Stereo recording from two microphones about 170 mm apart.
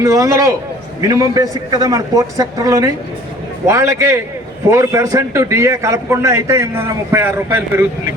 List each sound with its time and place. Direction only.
0.0 s a man's voice: 20° right (ahead or behind)